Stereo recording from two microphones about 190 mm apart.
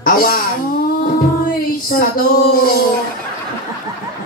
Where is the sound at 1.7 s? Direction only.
50° left (ahead or behind).